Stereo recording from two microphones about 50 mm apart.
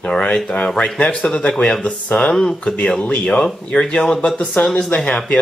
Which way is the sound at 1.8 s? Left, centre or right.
Left.